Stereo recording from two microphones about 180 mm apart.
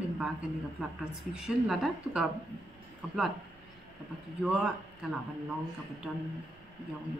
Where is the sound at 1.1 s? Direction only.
5° right (ahead or behind).